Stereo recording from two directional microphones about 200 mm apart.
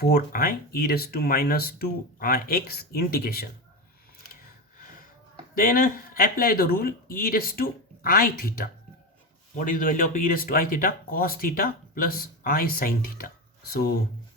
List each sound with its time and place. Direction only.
0.0 s speech: 50° left (ahead or behind)
5.5 s speech: 45° left (ahead or behind)